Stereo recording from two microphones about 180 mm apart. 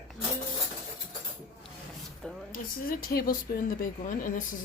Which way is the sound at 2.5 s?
55° left (ahead or behind).